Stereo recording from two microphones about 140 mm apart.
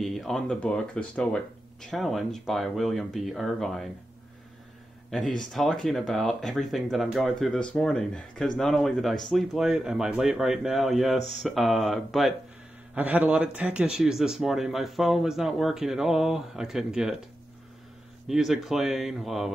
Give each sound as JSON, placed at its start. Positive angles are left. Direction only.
{"t": 0.0, "sound": "speech", "side_deg": 0}
{"t": 5.4, "sound": "speech", "side_deg": 5}
{"t": 11.1, "sound": "speech", "side_deg": 55}
{"t": 11.4, "sound": "speech", "side_deg": 0}
{"t": 12.9, "sound": "speech", "side_deg": -10}
{"t": 18.3, "sound": "speech", "side_deg": 0}